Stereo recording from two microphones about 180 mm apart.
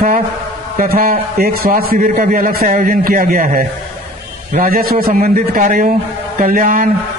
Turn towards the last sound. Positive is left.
turn(degrees=-50)  # may be behind; listen again after turning